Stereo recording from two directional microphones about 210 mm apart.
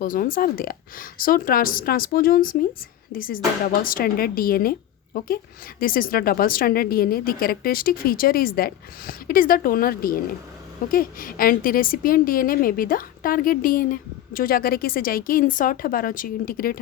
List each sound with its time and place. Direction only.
0.0 s a woman's voice: 40° left (ahead or behind)